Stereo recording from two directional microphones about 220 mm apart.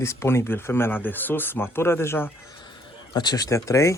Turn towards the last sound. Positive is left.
turn(degrees=15)  # may be behind; listen again after turning